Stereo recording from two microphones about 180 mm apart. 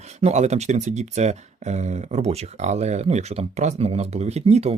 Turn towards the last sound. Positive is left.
turn(degrees=-35)  # may be behind; listen again after turning